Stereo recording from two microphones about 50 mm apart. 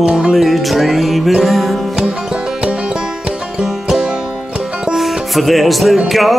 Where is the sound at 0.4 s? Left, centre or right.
Centre.